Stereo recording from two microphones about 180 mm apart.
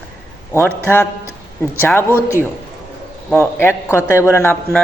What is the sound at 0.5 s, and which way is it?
A man's voice, 10° left (ahead or behind).